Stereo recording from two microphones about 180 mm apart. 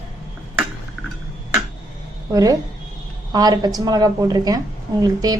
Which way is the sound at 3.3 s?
20° right (ahead or behind).